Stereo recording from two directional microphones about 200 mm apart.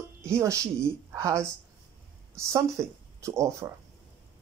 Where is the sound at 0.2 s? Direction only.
15° right (ahead or behind).